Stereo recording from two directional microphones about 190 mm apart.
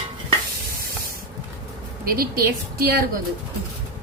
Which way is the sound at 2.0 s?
50° right (ahead or behind).